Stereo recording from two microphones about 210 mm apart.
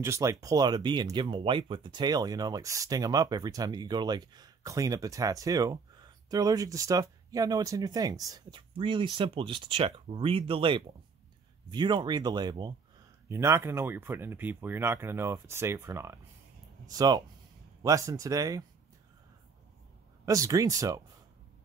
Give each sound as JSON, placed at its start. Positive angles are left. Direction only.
{"t": 0.0, "sound": "speech", "side_deg": -15}
{"t": 20.2, "sound": "speech", "side_deg": -15}